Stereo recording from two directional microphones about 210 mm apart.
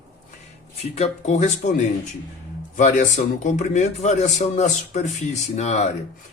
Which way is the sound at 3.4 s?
35° left (ahead or behind).